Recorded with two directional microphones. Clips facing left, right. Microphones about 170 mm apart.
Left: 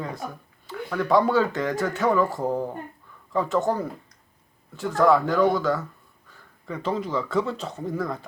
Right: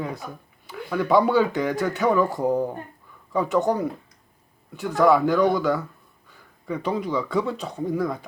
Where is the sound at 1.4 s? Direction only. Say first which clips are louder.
Right 2 dB; 15° right (ahead or behind).